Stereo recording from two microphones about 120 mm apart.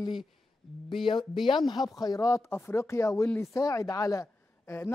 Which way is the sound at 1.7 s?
35° left (ahead or behind).